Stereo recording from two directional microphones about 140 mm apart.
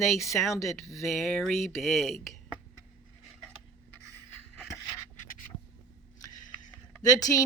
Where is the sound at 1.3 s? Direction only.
Centre (ahead or behind).